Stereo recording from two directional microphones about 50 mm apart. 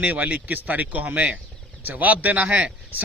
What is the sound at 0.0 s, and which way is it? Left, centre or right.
A man's voice, right.